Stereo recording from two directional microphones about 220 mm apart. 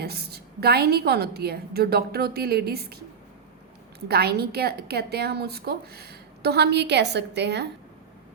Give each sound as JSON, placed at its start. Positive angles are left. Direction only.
{"t": 0.0, "sound": "a woman's voice", "side_deg": -45}
{"t": 4.1, "sound": "a woman's voice", "side_deg": -45}